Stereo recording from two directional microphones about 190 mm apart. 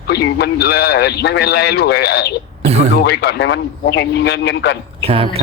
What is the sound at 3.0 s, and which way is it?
A man's voice, 55° left (ahead or behind).